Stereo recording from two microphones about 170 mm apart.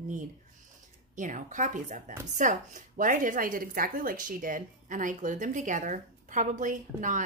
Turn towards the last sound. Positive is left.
turn(degrees=-45)  # may be behind; listen again after turning